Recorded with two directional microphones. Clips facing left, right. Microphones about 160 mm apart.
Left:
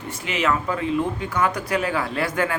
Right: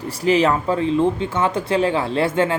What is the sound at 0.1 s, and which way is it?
Speech, 35° right (ahead or behind).